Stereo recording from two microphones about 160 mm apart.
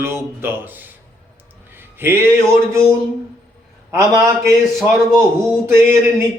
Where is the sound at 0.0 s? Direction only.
15° right (ahead or behind).